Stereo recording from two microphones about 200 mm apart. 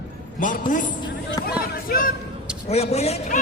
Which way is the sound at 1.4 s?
50° left (ahead or behind).